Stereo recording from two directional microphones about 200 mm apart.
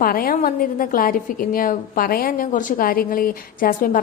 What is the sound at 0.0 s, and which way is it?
A woman's voice, 45° left (ahead or behind).